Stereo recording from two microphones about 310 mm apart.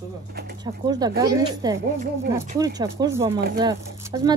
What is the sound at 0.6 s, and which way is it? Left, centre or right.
Speech, centre.